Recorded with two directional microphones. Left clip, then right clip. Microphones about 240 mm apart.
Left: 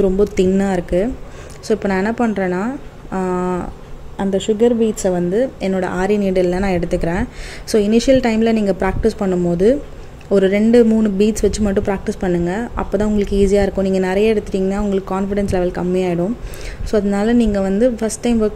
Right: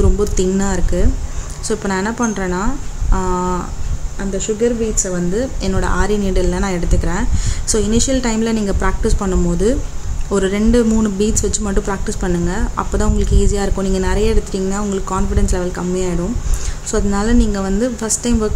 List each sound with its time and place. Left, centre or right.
0.0 s speech: centre
4.2 s a woman's voice: left
5.0 s speech: centre